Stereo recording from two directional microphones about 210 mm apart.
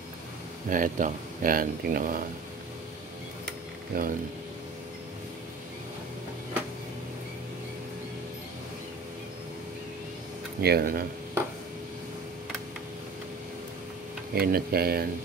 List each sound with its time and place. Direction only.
0.7 s speech: 40° right (ahead or behind)
3.9 s speech: 45° right (ahead or behind)
10.6 s speech: 45° right (ahead or behind)
14.3 s speech: 45° right (ahead or behind)